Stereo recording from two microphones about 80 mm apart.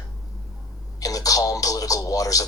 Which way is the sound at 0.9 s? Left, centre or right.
Left.